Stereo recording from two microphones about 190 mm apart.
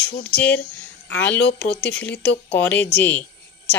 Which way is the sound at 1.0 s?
10° left (ahead or behind).